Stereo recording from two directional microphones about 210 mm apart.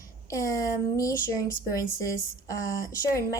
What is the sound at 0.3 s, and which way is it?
Speech, 15° left (ahead or behind).